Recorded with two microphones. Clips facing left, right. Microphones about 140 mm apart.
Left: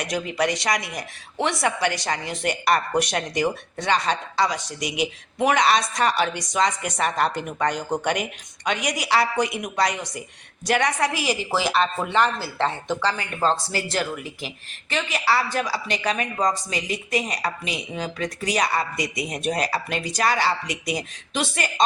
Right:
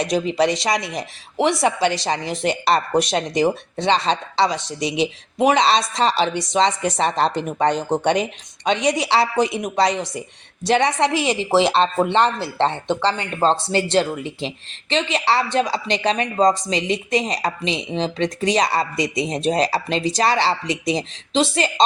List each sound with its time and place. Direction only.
0.0 s a woman's voice: 25° right (ahead or behind)